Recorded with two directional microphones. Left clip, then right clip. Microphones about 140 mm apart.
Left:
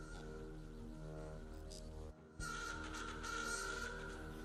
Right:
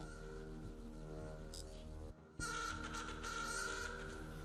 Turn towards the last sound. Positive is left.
turn(degrees=0)  # may be behind; listen again after turning